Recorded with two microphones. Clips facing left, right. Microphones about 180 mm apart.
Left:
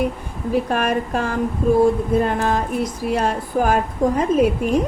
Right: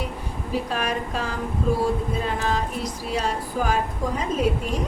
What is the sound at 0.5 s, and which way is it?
A woman's voice, 55° left (ahead or behind).